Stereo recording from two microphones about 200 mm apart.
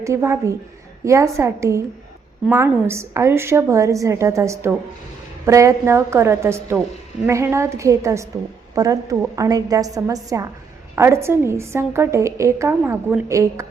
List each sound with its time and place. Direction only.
0.0 s a woman's voice: 15° right (ahead or behind)